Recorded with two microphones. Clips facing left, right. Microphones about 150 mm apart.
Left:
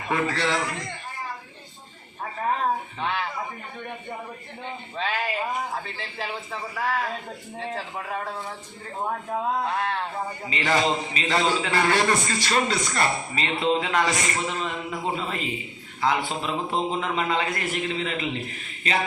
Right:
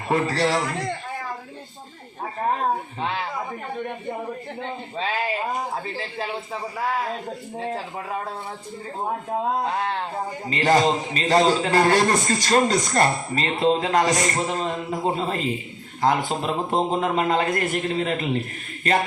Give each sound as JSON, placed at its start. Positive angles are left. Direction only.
{"t": 0.1, "sound": "a man's voice", "side_deg": -40}
{"t": 4.9, "sound": "a man's voice", "side_deg": -40}
{"t": 10.4, "sound": "a man's voice", "side_deg": -45}